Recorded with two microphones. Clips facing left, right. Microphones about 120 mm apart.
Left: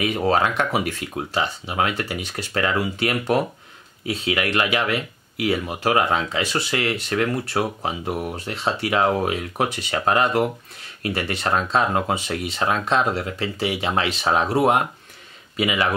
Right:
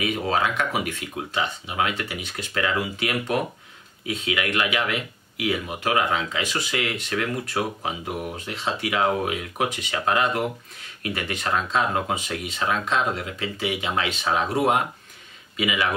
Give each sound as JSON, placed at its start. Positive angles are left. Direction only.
{"t": 0.3, "sound": "speech", "side_deg": 40}